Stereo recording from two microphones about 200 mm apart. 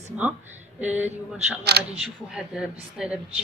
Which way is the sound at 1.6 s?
55° right (ahead or behind).